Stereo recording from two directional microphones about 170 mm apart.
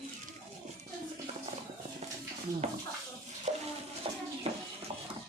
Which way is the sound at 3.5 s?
45° right (ahead or behind).